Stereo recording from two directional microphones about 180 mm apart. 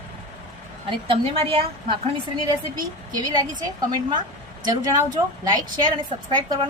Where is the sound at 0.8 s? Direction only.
30° right (ahead or behind).